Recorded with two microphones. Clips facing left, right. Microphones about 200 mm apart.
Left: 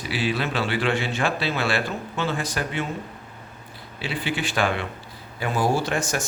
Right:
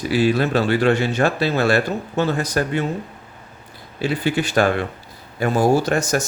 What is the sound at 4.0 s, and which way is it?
Speech, 45° right (ahead or behind).